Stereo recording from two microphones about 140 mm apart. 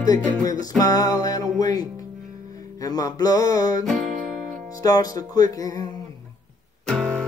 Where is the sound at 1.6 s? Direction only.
25° left (ahead or behind).